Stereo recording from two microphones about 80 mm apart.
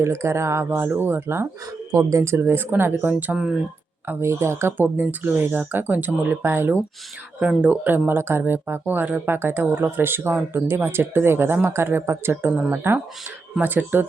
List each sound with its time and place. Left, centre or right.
0.0 s speech: right
1.9 s speech: right
7.3 s speech: centre